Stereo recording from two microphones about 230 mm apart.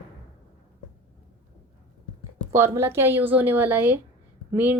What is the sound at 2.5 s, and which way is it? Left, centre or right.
A woman's voice, centre.